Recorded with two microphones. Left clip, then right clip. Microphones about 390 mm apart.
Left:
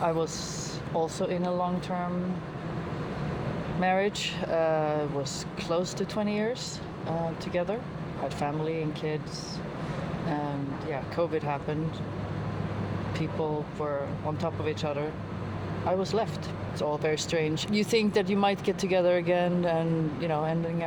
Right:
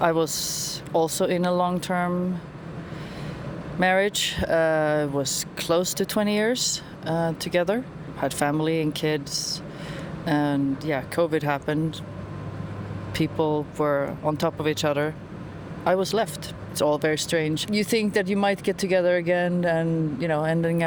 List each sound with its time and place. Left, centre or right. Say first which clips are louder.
0.0 s speech: right 6 dB; right
3.8 s speech: right 6 dB; right
13.1 s speech: right 8 dB; right